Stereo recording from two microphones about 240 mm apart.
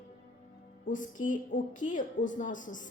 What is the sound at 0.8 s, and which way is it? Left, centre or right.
A woman's voice, left.